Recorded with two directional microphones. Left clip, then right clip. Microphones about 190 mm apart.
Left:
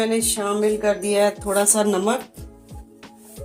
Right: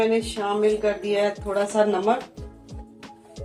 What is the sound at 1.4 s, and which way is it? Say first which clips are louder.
Speech: left 2 dB; 65° left (ahead or behind).